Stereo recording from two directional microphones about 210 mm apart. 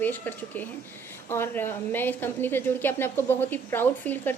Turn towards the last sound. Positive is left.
turn(degrees=10)  # may be behind; listen again after turning